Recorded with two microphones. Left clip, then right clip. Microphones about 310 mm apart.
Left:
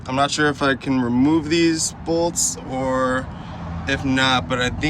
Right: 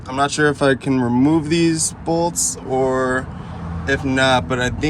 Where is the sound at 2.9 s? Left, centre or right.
Centre.